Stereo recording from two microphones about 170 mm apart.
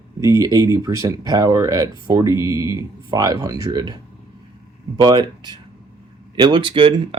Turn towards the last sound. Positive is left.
turn(degrees=-30)  # may be behind; listen again after turning